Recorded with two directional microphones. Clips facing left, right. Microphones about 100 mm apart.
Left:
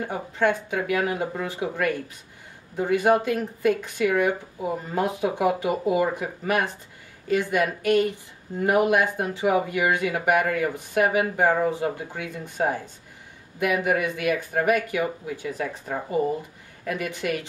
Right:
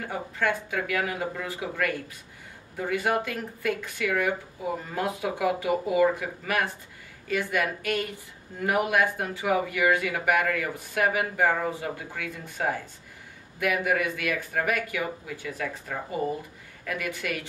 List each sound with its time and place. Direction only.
0.0 s speech: 25° left (ahead or behind)